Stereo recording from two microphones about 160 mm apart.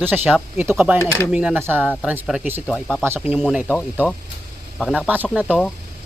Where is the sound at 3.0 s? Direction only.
15° right (ahead or behind).